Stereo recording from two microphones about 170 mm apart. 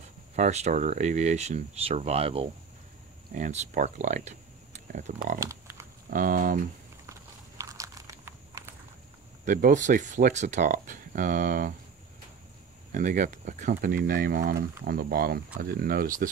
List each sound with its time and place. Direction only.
0.4 s speech: 40° right (ahead or behind)
3.3 s speech: 45° right (ahead or behind)
5.4 s a sound: 15° right (ahead or behind)
6.0 s speech: 55° right (ahead or behind)
7.1 s a sound: 20° right (ahead or behind)
9.4 s speech: 50° right (ahead or behind)
12.9 s speech: 50° right (ahead or behind)